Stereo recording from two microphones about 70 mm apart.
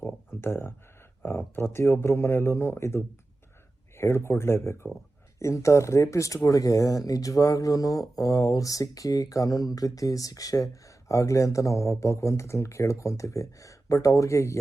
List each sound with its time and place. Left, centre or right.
0.4 s speech: left